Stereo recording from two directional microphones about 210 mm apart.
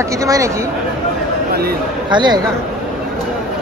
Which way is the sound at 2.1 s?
20° right (ahead or behind).